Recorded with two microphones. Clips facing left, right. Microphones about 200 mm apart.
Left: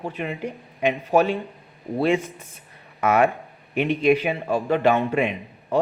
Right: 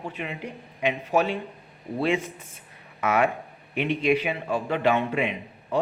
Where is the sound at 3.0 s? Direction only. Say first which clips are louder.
Left 4 dB; 45° left (ahead or behind).